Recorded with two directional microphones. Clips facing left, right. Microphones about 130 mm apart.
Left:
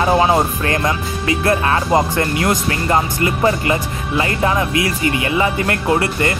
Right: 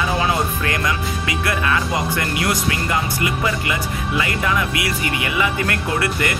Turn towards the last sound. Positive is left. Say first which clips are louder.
# left 4 dB
turn(degrees=30)  # may be behind; listen again after turning